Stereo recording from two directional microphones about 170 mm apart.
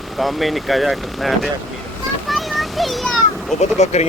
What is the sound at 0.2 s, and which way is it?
Speech, centre (ahead or behind).